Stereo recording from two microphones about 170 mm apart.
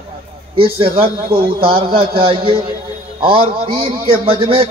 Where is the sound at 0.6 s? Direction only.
30° right (ahead or behind).